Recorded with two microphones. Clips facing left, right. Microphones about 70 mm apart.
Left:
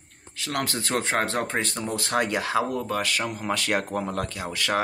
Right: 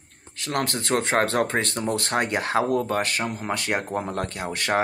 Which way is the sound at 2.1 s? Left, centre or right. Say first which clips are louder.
Even; right.